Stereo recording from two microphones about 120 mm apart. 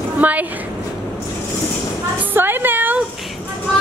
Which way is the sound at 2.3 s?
15° right (ahead or behind).